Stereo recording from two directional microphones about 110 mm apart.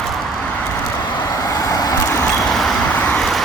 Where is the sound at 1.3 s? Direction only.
30° left (ahead or behind).